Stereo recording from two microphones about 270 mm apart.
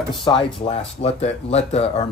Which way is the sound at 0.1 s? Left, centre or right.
Centre.